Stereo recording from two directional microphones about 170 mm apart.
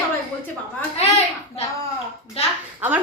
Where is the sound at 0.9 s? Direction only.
40° left (ahead or behind).